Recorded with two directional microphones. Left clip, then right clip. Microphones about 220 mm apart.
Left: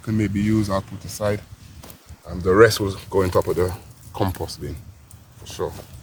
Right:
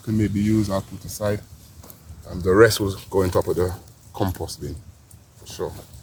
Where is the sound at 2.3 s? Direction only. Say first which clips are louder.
Left 1 dB; 20° right (ahead or behind).